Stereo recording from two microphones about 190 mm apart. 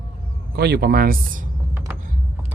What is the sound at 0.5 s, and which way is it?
Speech, 60° right (ahead or behind).